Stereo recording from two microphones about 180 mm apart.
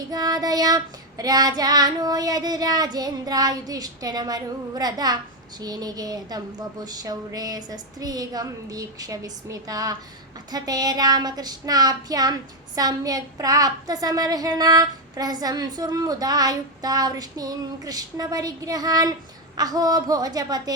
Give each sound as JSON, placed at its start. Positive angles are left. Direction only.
{"t": 0.1, "sound": "child singing", "side_deg": -20}